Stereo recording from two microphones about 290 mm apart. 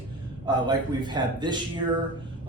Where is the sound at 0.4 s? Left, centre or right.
Centre.